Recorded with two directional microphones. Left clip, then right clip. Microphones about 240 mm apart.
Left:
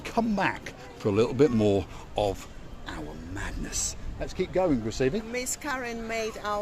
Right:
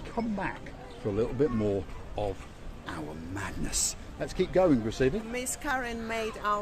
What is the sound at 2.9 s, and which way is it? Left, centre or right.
A woman's voice, centre.